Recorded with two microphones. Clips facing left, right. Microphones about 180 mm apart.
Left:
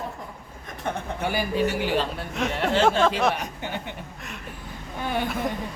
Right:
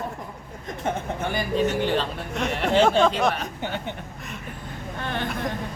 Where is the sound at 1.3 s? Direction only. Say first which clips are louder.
Right 1 dB; 10° left (ahead or behind).